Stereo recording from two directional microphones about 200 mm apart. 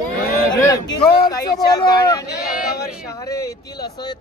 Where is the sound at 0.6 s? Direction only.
15° left (ahead or behind).